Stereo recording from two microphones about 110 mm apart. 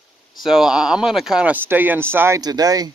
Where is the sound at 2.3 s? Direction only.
35° right (ahead or behind).